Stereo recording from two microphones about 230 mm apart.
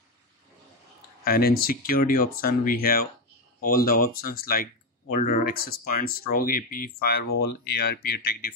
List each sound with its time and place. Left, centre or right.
1.2 s speech: left